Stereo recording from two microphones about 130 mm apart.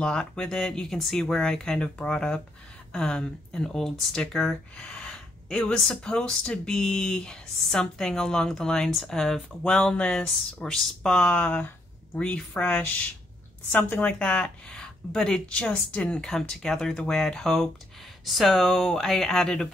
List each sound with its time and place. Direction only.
0.0 s speech: 5° left (ahead or behind)